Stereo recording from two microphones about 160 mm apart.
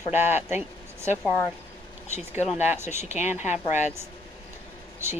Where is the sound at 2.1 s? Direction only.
45° left (ahead or behind).